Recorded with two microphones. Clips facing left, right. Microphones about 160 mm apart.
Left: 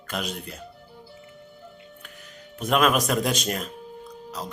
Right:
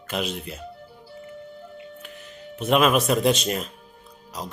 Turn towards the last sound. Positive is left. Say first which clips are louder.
# left 1 dB
turn(degrees=-10)  # may be behind; listen again after turning